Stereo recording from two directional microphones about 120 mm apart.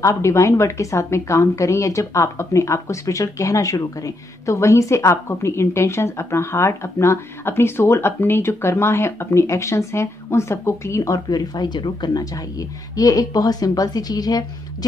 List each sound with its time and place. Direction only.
0.0 s a woman's voice: 25° left (ahead or behind)